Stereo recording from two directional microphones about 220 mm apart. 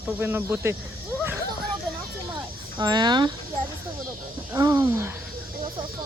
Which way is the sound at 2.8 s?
20° right (ahead or behind).